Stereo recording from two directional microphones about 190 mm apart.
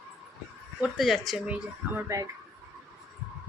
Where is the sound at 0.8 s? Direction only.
Centre (ahead or behind); by 2.3 s 15° right (ahead or behind).